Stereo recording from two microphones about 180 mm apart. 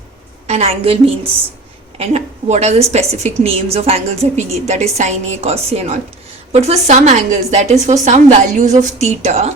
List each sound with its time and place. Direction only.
0.4 s a woman's voice: 35° right (ahead or behind)
2.0 s a woman's voice: 40° right (ahead or behind)